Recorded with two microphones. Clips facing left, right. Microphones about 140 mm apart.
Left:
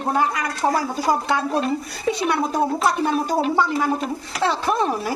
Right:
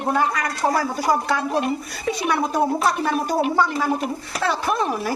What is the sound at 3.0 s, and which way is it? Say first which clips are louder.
A woman's voice: left 1 dB; 20° left (ahead or behind).